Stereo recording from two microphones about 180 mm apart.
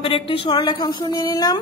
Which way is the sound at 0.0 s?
30° left (ahead or behind).